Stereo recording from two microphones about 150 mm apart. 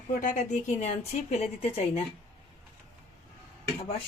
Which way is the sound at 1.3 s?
45° left (ahead or behind).